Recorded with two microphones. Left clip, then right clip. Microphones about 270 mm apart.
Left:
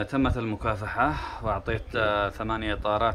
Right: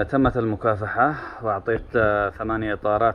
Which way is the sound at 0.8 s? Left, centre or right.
Centre.